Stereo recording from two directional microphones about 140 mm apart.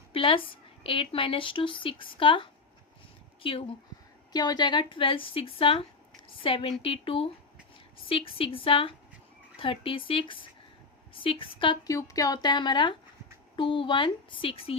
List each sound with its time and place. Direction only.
0.1 s a woman's voice: 40° left (ahead or behind)
4.3 s a woman's voice: 30° left (ahead or behind)
11.9 s a woman's voice: 25° left (ahead or behind); by 14.8 s 40° left (ahead or behind)